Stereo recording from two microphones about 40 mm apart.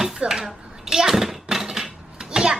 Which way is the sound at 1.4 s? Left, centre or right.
Centre.